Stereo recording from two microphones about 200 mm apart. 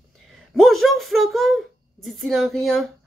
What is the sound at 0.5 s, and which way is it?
A woman's voice, centre (ahead or behind).